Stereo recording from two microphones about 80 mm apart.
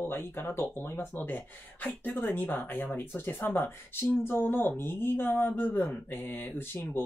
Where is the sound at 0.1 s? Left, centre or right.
Left.